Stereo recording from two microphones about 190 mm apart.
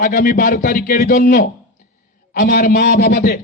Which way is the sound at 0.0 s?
50° left (ahead or behind).